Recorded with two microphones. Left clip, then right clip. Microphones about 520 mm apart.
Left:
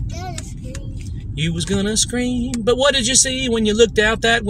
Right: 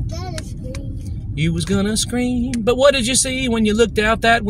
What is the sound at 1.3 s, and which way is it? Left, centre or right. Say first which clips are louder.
Speech: right 1 dB; right.